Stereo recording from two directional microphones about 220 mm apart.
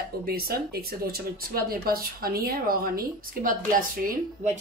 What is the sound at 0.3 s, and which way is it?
Speech, 45° right (ahead or behind).